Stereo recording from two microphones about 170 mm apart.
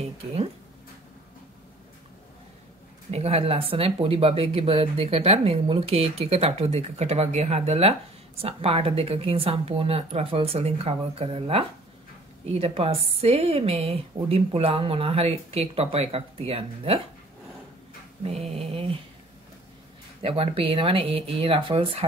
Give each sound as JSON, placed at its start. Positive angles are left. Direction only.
{"t": 3.1, "sound": "speech", "side_deg": -35}
{"t": 18.2, "sound": "speech", "side_deg": -35}
{"t": 20.2, "sound": "speech", "side_deg": -35}